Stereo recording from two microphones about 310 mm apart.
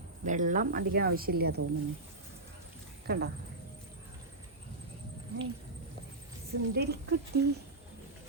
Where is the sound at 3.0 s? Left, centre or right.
Right.